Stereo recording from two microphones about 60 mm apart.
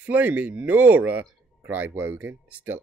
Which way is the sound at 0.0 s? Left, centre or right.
Right.